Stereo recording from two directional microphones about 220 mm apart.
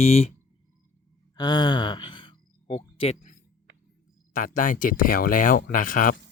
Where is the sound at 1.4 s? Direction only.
20° left (ahead or behind).